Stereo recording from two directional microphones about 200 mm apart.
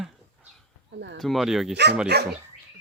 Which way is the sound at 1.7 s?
55° right (ahead or behind).